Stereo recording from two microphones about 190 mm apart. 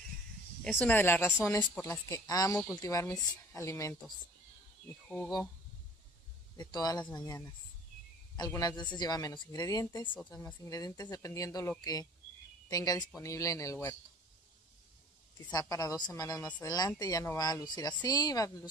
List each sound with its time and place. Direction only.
0.7 s speech: 10° left (ahead or behind)
5.0 s speech: 5° left (ahead or behind)
6.5 s speech: 20° left (ahead or behind)
8.5 s speech: 20° left (ahead or behind)
15.7 s speech: 20° left (ahead or behind)